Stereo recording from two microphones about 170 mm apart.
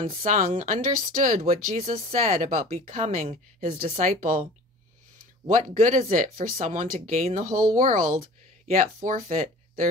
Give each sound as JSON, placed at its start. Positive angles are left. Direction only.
{"t": 0.1, "sound": "speech", "side_deg": -50}
{"t": 1.4, "sound": "speech", "side_deg": -40}